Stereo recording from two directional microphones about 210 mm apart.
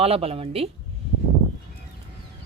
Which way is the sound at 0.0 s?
30° right (ahead or behind).